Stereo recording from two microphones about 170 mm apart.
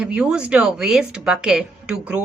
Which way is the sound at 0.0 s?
5° right (ahead or behind).